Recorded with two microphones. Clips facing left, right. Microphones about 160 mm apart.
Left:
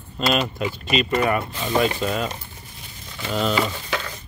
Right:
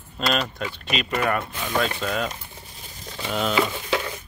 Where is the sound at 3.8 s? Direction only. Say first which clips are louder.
Right 3 dB; 15° right (ahead or behind).